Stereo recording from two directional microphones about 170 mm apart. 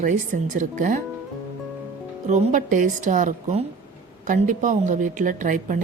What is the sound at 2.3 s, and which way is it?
Speech, 45° right (ahead or behind).